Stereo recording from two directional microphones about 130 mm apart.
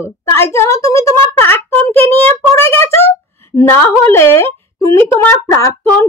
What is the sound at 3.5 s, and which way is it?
A woman's voice, 20° left (ahead or behind).